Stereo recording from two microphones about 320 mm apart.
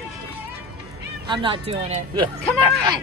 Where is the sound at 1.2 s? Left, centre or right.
Centre.